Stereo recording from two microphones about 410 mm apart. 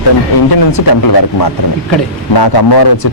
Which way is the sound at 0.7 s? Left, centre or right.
Left.